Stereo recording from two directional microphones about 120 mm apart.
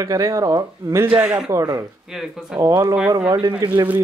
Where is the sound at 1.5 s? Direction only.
25° right (ahead or behind).